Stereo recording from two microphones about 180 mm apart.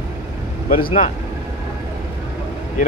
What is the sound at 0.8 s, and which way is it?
Speech, 40° left (ahead or behind).